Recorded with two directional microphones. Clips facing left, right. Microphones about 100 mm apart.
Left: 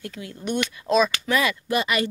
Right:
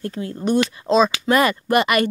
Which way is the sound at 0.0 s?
40° right (ahead or behind).